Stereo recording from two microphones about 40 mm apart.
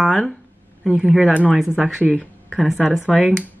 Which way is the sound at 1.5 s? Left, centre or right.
Centre.